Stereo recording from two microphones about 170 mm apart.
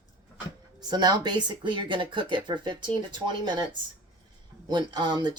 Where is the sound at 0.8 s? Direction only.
25° right (ahead or behind).